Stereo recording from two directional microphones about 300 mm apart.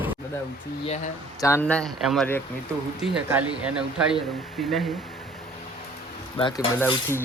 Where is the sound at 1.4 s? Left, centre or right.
Centre.